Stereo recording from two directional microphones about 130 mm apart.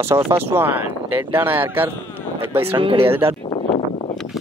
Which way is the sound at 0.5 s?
15° right (ahead or behind).